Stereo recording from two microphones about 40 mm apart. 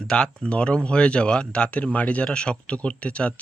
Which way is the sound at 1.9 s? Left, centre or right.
Left.